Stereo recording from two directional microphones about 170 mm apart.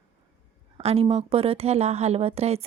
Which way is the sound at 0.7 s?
35° right (ahead or behind).